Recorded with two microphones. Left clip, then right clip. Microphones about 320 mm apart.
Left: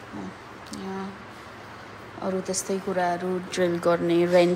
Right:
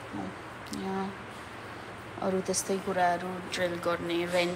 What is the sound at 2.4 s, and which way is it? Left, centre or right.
A woman's voice, centre.